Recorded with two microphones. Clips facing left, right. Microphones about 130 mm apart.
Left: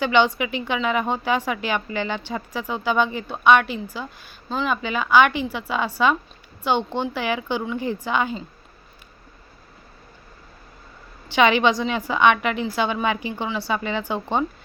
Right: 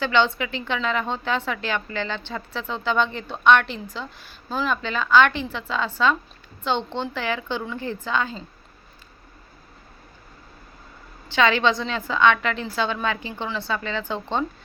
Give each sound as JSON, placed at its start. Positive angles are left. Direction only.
{"t": 0.0, "sound": "a woman's voice", "side_deg": 15}
{"t": 4.7, "sound": "a woman's voice", "side_deg": 10}
{"t": 11.3, "sound": "a woman's voice", "side_deg": 15}